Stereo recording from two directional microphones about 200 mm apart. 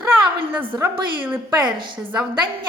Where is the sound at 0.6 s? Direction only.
25° right (ahead or behind).